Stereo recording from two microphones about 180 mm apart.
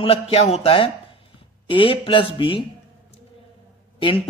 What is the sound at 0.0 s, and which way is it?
A man's voice, 35° left (ahead or behind).